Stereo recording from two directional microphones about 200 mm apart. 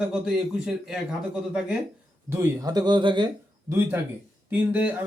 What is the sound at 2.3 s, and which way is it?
Speech, 15° right (ahead or behind).